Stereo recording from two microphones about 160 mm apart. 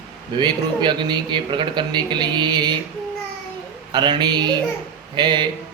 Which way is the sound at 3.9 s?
30° right (ahead or behind).